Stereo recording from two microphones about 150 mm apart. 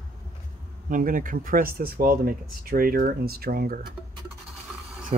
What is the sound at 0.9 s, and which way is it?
Speech, 65° right (ahead or behind).